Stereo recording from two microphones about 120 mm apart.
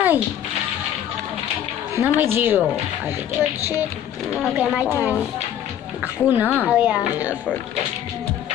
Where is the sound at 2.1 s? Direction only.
20° right (ahead or behind).